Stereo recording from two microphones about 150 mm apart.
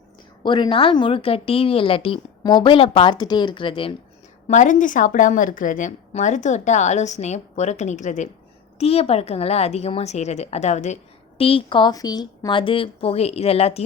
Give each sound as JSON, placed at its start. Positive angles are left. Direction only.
{"t": 0.4, "sound": "a woman's voice", "side_deg": 30}
{"t": 4.4, "sound": "a woman's voice", "side_deg": 55}
{"t": 8.8, "sound": "a woman's voice", "side_deg": 40}
{"t": 11.3, "sound": "a woman's voice", "side_deg": 40}